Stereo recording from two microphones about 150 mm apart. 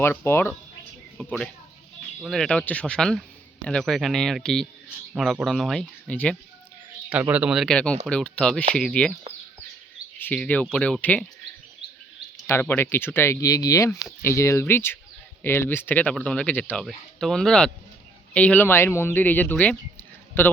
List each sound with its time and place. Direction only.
0.0 s speech: 15° left (ahead or behind)
1.2 s a man's voice: 5° left (ahead or behind)
7.1 s a man's voice: 10° right (ahead or behind); by 9.1 s 5° left (ahead or behind)
10.2 s speech: 10° left (ahead or behind)
12.5 s a man's voice: 15° left (ahead or behind)